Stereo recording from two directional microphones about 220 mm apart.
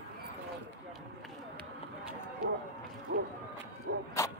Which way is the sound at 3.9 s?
90° right.